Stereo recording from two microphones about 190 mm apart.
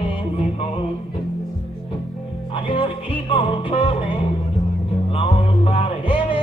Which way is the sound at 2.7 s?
30° left (ahead or behind).